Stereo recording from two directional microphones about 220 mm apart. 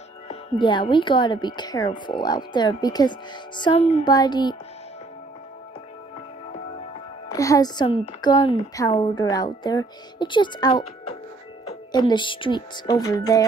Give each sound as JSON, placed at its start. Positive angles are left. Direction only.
{"t": 0.3, "sound": "speech", "side_deg": 20}
{"t": 7.3, "sound": "speech", "side_deg": 15}
{"t": 12.1, "sound": "speech", "side_deg": 20}